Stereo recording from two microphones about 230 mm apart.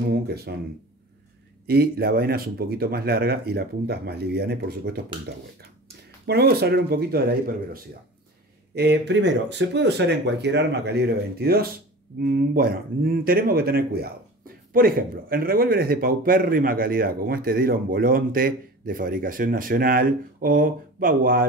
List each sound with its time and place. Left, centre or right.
0.1 s speech: right
1.7 s speech: right
6.2 s speech: right